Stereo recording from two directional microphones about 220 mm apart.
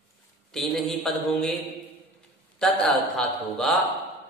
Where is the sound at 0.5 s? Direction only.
Centre (ahead or behind).